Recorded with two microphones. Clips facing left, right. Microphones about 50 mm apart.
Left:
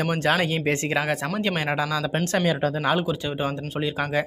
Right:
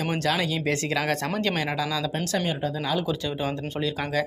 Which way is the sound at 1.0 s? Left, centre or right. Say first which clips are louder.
Left 1 dB; centre.